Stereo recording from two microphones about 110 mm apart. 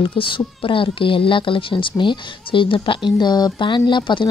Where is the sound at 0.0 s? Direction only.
50° left (ahead or behind).